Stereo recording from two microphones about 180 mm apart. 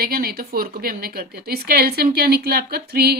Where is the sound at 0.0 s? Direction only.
55° right (ahead or behind).